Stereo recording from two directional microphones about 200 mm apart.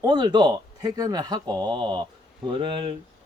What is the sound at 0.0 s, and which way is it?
Speech, 20° right (ahead or behind).